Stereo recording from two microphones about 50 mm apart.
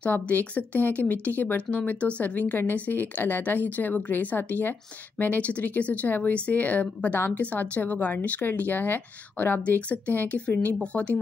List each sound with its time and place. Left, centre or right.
0.0 s a woman's voice: left
7.6 s a woman's voice: left